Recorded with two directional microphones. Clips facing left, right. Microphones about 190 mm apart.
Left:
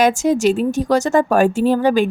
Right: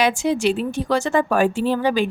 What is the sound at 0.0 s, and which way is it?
A woman's voice, 45° left (ahead or behind).